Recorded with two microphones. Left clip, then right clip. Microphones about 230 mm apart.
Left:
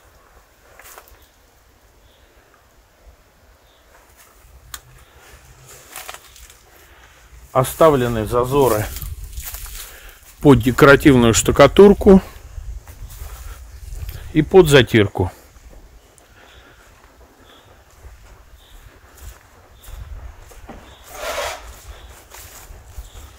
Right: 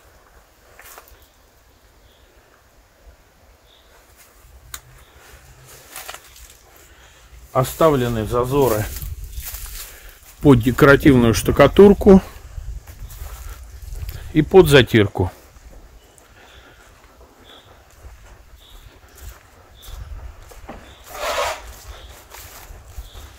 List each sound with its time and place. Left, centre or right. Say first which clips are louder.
7.5 s speech: left 3 dB; left
10.4 s speech: left 2 dB; left
11.8 s speech: left 1 dB; centre
13.5 s a sound: even; centre
21.1 s a sound: right 3 dB; centre
21.5 s rub: right 2 dB; centre